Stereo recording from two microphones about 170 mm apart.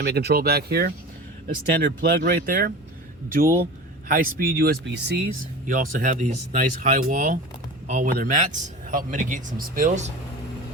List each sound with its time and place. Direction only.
0.0 s speech: 75° right (ahead or behind); by 2.7 s 60° right (ahead or behind)
4.1 s speech: 60° right (ahead or behind); by 5.1 s 80° right
5.6 s speech: 50° right (ahead or behind)